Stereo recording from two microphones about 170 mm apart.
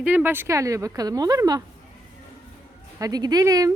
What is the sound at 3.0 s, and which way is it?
Speech, 20° right (ahead or behind).